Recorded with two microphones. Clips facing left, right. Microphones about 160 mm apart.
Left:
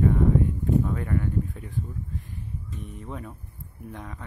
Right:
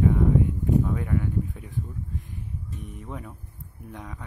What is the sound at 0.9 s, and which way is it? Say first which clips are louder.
Speech: even; 10° right (ahead or behind).